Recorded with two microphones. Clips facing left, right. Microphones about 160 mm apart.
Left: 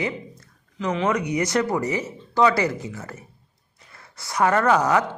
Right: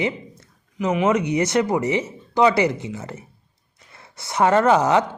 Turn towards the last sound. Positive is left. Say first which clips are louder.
# right 3 dB
turn(degrees=-25)  # may be behind; listen again after turning